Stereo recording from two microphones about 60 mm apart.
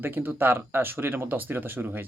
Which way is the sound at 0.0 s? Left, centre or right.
Right.